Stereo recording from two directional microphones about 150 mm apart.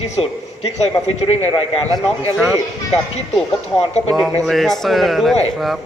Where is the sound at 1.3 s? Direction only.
40° left (ahead or behind).